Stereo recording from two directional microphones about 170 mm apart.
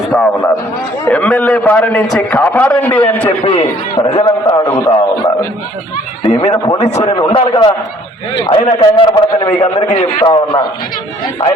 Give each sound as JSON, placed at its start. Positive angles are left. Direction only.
{"t": 0.1, "sound": "a man's voice", "side_deg": 5}
{"t": 3.4, "sound": "a man's voice", "side_deg": 35}
{"t": 9.9, "sound": "a man's voice", "side_deg": 40}
{"t": 10.2, "sound": "a man's voice", "side_deg": 25}